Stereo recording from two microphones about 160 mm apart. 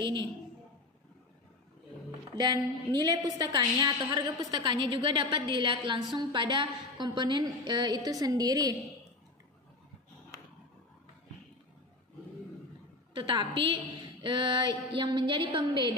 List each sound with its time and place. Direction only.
0.0 s a woman's voice: 30° right (ahead or behind)
2.0 s a woman's voice: 25° right (ahead or behind)
13.1 s a woman's voice: 30° right (ahead or behind)